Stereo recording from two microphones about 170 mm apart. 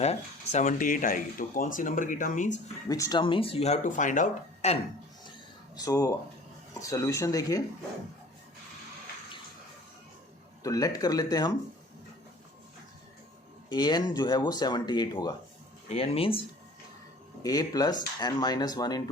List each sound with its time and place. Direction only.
0.0 s speech: 40° left (ahead or behind)
2.9 s speech: 20° left (ahead or behind); by 4.8 s 45° left (ahead or behind)
5.7 s speech: 20° left (ahead or behind)
10.6 s speech: 20° left (ahead or behind)
13.7 s speech: 25° left (ahead or behind)
15.9 s speech: 35° left (ahead or behind)
17.4 s speech: 20° left (ahead or behind)